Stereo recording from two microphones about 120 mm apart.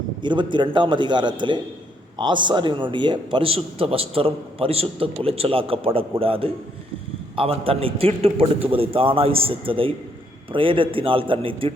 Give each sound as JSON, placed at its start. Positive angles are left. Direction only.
{"t": 0.2, "sound": "a man's voice", "side_deg": -40}